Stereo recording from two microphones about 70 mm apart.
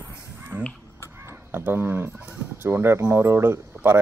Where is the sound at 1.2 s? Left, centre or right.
Right.